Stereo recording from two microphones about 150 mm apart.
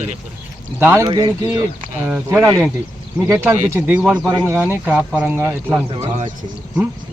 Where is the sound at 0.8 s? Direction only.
15° right (ahead or behind).